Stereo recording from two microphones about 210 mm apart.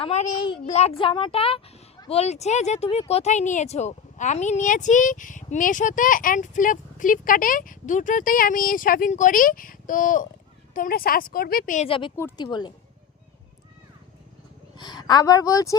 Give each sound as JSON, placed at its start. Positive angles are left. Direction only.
{"t": 0.0, "sound": "speech", "side_deg": 35}
{"t": 0.3, "sound": "speech", "side_deg": 20}
{"t": 0.6, "sound": "speech", "side_deg": 30}
{"t": 11.9, "sound": "speech", "side_deg": 25}
{"t": 14.8, "sound": "a woman's voice", "side_deg": 20}